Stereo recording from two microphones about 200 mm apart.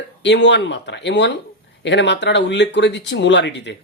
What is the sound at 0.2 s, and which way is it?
Speech, 60° left (ahead or behind).